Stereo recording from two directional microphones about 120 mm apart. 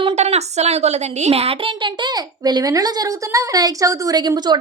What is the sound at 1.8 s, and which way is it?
A child's voice, 40° right (ahead or behind).